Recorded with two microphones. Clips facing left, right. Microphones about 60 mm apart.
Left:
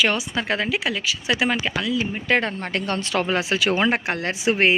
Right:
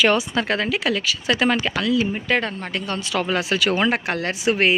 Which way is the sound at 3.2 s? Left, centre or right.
Left.